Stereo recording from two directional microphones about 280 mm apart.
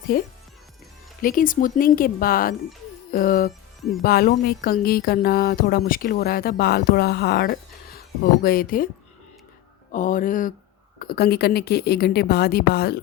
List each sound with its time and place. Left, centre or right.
0.1 s speech: left
9.9 s speech: left